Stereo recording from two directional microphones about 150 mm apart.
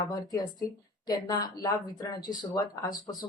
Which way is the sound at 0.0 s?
25° left (ahead or behind).